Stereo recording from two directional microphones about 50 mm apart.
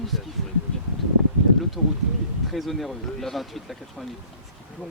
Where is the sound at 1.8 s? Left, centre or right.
Centre.